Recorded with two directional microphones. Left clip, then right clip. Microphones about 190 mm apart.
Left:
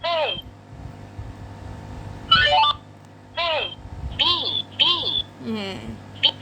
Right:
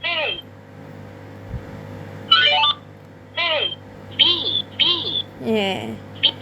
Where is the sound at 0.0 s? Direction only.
30° left (ahead or behind).